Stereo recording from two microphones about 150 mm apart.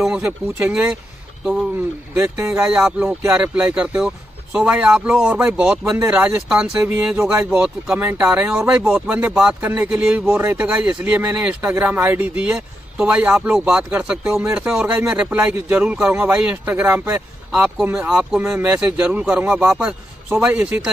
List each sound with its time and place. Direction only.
0.0 s speech: 10° right (ahead or behind)
2.1 s speech: 15° right (ahead or behind)
7.5 s speech: 5° right (ahead or behind)
10.7 s speech: 5° right (ahead or behind)